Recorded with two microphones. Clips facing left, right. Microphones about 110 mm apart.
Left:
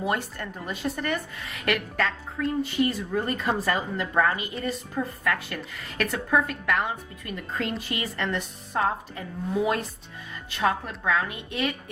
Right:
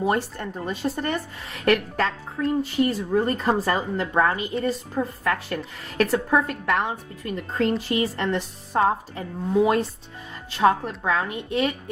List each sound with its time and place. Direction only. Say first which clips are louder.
0.0 s a woman's voice: right 4 dB; 30° right (ahead or behind)
10.5 s a woman's voice: right 6 dB; 30° right (ahead or behind)